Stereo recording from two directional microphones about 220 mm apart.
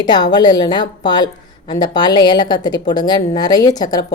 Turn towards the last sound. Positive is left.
turn(degrees=20)  # may be behind; listen again after turning